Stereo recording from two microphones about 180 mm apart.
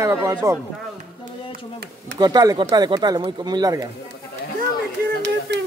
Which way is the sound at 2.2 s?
20° right (ahead or behind).